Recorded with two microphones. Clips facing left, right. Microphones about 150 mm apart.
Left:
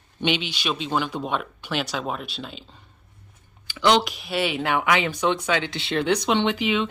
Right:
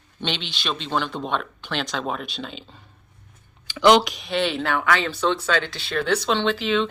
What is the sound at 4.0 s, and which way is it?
Speech, 5° left (ahead or behind).